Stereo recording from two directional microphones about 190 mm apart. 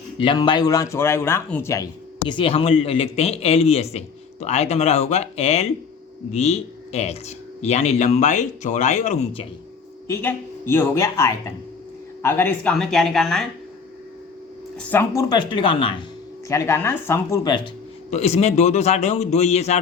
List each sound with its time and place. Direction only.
0.2 s speech: 25° left (ahead or behind)
10.1 s a woman's voice: 10° left (ahead or behind)
14.8 s speech: 10° left (ahead or behind); by 16.0 s 25° left (ahead or behind)
16.5 s a woman's voice: 15° left (ahead or behind)
18.1 s speech: 35° left (ahead or behind)